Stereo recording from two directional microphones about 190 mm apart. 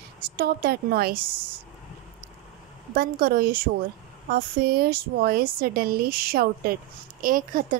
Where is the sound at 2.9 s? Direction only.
50° right (ahead or behind).